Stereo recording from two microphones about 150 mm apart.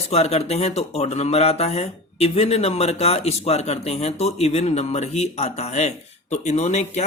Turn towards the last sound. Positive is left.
turn(degrees=45)  # may be behind; listen again after turning